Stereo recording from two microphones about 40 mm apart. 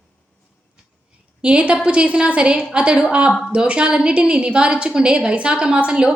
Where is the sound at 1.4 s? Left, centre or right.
Right.